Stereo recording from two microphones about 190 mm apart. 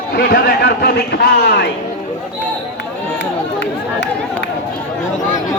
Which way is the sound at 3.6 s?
65° left (ahead or behind).